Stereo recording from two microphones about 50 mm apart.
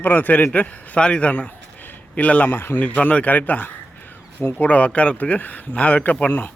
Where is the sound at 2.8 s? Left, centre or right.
Left.